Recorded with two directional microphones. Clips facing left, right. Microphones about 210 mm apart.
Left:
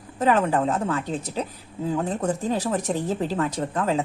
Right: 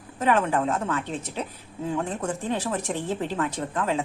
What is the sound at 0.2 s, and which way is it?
Speech, 35° left (ahead or behind).